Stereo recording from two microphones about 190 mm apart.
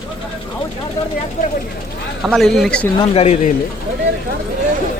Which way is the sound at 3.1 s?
35° left (ahead or behind).